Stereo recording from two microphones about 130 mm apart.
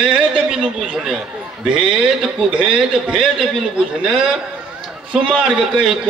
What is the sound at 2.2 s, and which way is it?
A man's voice, 5° right (ahead or behind).